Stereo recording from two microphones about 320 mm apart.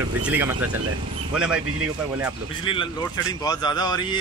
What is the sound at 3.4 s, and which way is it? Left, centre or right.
Speech, centre.